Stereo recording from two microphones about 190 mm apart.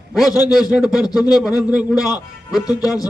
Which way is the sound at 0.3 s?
20° left (ahead or behind).